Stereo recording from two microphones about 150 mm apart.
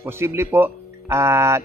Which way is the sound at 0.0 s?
15° right (ahead or behind).